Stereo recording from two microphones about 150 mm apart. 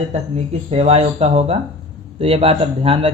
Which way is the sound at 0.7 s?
45° right (ahead or behind).